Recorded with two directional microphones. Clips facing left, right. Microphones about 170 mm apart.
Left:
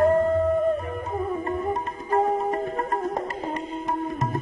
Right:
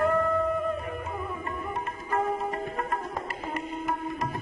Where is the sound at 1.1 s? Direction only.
35° left (ahead or behind).